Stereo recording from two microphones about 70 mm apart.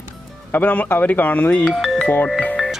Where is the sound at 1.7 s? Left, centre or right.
Centre.